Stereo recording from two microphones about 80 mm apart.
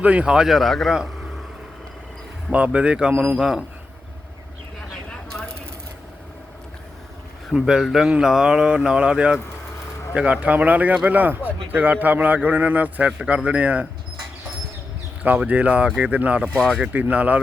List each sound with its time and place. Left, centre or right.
0.0 s speech: centre
2.5 s speech: centre
7.5 s a man's voice: centre
15.2 s speech: centre
16.6 s speech: centre
16.9 s a man's voice: centre